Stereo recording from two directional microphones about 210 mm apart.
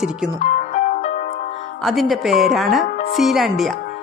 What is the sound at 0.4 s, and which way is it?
Music, 35° left (ahead or behind).